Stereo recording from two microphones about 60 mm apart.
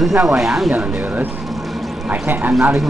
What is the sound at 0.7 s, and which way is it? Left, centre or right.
Speech, right.